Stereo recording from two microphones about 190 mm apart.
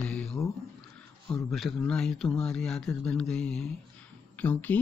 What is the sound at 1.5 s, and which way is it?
Speech, 5° left (ahead or behind).